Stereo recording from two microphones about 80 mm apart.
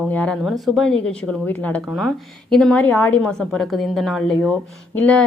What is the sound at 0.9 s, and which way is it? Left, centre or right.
Speech, centre.